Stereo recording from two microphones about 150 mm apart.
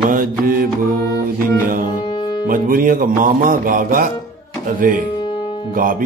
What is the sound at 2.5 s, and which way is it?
Music, 70° right (ahead or behind).